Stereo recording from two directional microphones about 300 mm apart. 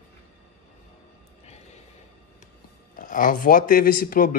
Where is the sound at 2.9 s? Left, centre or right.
Left.